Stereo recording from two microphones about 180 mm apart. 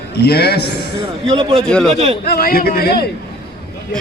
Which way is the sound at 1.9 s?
35° right (ahead or behind).